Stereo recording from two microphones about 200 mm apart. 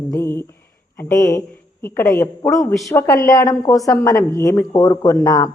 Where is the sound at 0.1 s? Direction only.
10° left (ahead or behind).